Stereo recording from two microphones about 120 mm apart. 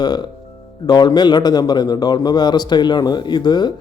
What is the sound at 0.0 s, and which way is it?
A man's voice, 35° left (ahead or behind).